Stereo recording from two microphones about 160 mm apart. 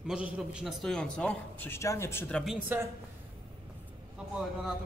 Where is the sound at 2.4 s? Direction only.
10° right (ahead or behind).